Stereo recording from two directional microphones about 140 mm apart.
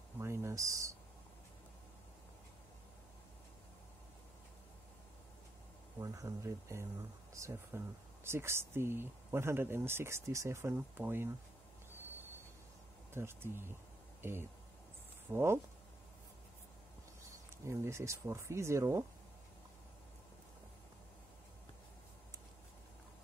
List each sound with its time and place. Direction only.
0.2 s speech: 20° right (ahead or behind)
5.9 s speech: 25° right (ahead or behind)
13.1 s speech: 15° right (ahead or behind)
17.6 s speech: 20° right (ahead or behind)